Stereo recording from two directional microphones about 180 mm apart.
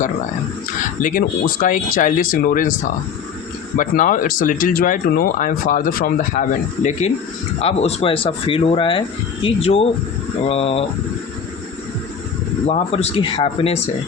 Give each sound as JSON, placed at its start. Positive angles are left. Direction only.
{"t": 1.0, "sound": "speech", "side_deg": 50}
{"t": 3.8, "sound": "speech", "side_deg": 45}
{"t": 7.6, "sound": "speech", "side_deg": 35}
{"t": 12.6, "sound": "speech", "side_deg": 35}